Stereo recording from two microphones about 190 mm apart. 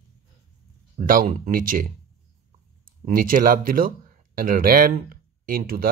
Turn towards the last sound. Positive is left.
turn(degrees=-50)  # may be behind; listen again after turning